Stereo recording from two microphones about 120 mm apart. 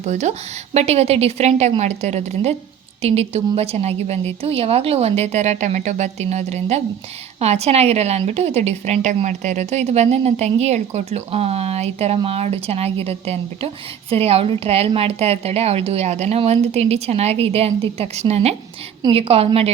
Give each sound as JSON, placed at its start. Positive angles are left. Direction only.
{"t": 0.0, "sound": "a woman's voice", "side_deg": -75}